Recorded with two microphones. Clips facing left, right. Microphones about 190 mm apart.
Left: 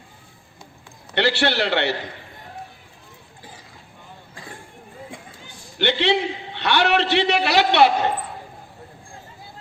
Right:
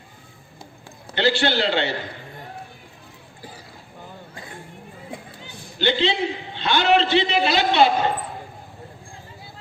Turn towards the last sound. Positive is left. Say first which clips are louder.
# left 1 dB
turn(degrees=70)  # may be behind; listen again after turning